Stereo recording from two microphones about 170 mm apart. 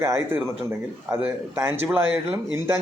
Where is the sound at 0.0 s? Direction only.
15° right (ahead or behind).